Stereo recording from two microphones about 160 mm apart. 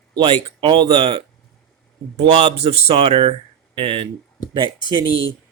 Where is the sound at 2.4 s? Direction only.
40° right (ahead or behind).